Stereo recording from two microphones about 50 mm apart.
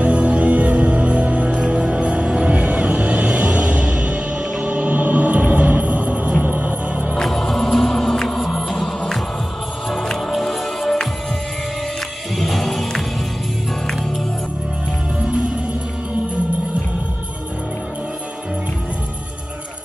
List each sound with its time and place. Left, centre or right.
0.0 s music: right
1.6 s music: centre; by 7.2 s right
7.2 s music: centre
12.4 s music: centre
15.1 s music: right